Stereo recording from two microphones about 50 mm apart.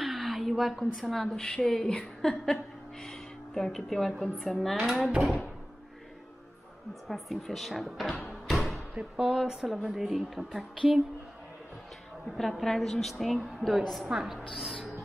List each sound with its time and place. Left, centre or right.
0.0 s a sound: centre
1.1 s a woman's voice: centre
7.1 s a woman's voice: centre
8.3 s music: centre
8.9 s a woman's voice: right; by 10.6 s centre
12.3 s a woman's voice: centre